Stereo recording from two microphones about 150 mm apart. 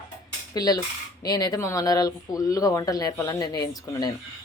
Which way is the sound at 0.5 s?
25° left (ahead or behind).